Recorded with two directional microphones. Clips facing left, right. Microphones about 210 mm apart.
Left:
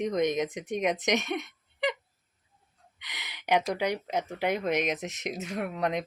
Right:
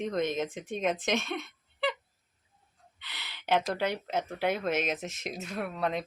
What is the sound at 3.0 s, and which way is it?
Speech, 15° left (ahead or behind).